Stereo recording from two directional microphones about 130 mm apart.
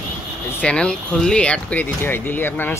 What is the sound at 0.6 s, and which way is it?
Speech, 10° left (ahead or behind).